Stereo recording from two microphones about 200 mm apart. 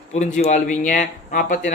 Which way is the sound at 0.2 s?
35° left (ahead or behind).